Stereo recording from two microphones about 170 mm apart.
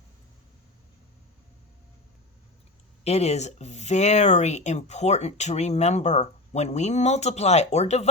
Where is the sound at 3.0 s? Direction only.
40° left (ahead or behind).